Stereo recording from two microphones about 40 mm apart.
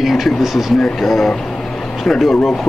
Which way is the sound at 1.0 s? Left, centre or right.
Centre.